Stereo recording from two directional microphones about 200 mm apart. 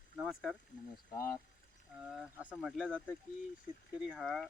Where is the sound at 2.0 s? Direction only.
5° right (ahead or behind).